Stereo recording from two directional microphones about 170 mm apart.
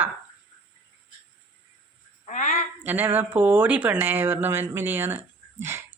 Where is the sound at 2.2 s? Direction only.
45° left (ahead or behind).